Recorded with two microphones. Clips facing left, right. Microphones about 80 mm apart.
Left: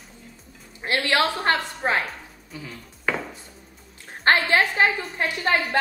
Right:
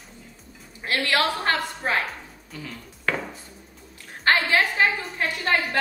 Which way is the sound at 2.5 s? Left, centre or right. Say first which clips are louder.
Even; centre.